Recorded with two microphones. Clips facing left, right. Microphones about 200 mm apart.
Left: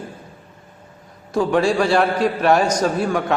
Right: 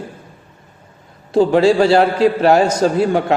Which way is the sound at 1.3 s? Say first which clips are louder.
Right 6 dB; 25° right (ahead or behind).